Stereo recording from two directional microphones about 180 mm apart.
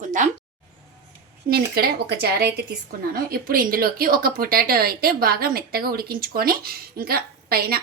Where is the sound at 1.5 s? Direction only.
60° right (ahead or behind).